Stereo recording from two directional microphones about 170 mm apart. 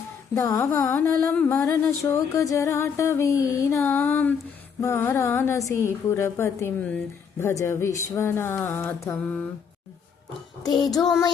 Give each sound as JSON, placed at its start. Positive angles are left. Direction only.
{"t": 0.3, "sound": "music", "side_deg": 15}